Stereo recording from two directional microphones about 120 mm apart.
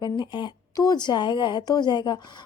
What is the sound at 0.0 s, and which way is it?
Speech, 40° left (ahead or behind).